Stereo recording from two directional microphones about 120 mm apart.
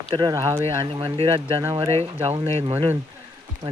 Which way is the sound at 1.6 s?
25° right (ahead or behind).